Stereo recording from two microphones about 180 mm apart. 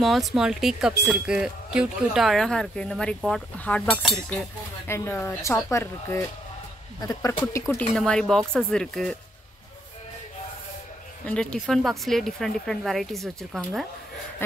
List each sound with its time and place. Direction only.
0.0 s speech: centre (ahead or behind); by 7.8 s 15° left (ahead or behind)
7.9 s speech: 5° left (ahead or behind)
11.2 s speech: 5° left (ahead or behind)